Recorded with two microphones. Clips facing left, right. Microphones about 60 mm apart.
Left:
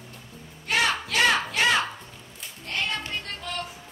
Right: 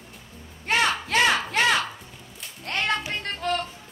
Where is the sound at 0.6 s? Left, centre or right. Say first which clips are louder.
Right 2 dB; right.